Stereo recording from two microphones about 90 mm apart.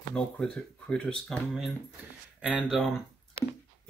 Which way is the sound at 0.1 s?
10° left (ahead or behind).